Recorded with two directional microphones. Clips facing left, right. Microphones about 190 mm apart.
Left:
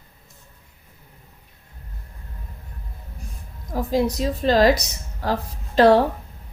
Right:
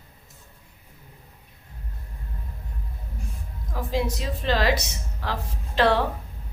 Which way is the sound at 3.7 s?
40° left (ahead or behind).